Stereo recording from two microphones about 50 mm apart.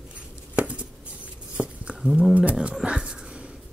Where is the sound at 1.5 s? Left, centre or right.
Right.